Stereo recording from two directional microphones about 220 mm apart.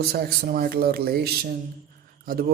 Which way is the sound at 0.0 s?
45° right (ahead or behind).